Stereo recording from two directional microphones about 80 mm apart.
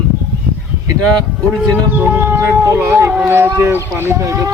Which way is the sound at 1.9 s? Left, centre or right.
Right.